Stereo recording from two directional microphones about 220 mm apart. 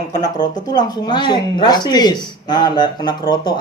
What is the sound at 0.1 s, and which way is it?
Speech, 20° left (ahead or behind).